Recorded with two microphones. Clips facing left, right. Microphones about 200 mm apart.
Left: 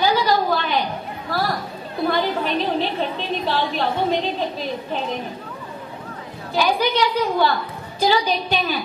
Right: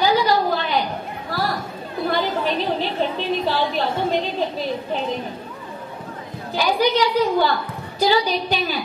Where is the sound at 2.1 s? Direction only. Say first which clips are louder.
Even; 45° right (ahead or behind).